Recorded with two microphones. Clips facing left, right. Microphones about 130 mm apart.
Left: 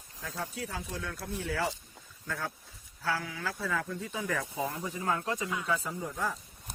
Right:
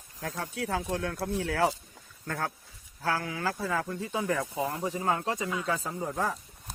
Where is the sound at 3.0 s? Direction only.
45° right (ahead or behind).